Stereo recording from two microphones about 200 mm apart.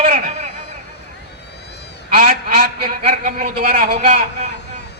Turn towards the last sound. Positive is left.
turn(degrees=-35)  # may be behind; listen again after turning